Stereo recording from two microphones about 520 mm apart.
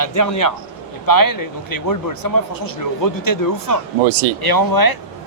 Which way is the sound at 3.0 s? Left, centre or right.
Left.